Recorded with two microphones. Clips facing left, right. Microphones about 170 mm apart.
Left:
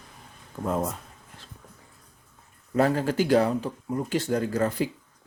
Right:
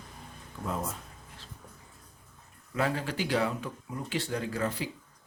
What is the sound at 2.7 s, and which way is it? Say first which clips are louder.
Speech: left 8 dB; 40° left (ahead or behind).